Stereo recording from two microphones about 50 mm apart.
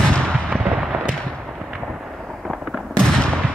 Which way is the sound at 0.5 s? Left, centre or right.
Right.